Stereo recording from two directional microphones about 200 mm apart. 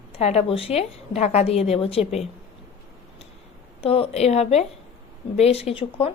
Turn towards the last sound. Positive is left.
turn(degrees=30)  # may be behind; listen again after turning